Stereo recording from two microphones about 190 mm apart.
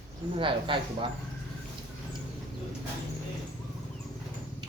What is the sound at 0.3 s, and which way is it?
Speech, 25° right (ahead or behind).